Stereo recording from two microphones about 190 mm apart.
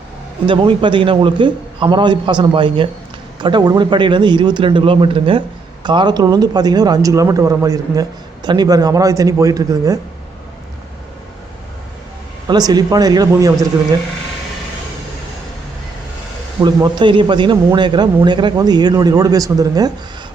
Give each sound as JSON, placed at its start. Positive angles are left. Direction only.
{"t": 0.4, "sound": "speech", "side_deg": -25}
{"t": 12.5, "sound": "speech", "side_deg": -20}
{"t": 16.6, "sound": "speech", "side_deg": -20}